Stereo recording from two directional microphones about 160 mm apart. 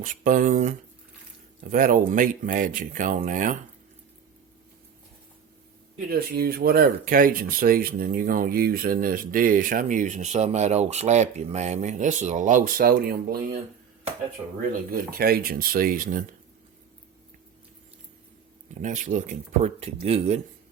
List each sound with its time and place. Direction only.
0.0 s speech: 60° right (ahead or behind)
6.1 s speech: 70° right (ahead or behind)
14.7 s speech: 65° right (ahead or behind)
18.7 s speech: 50° right (ahead or behind)